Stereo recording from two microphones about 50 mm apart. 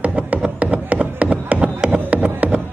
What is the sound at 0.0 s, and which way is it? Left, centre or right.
Music, right.